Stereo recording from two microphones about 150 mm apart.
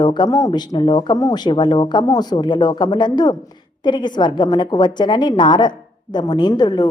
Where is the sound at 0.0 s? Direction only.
30° left (ahead or behind).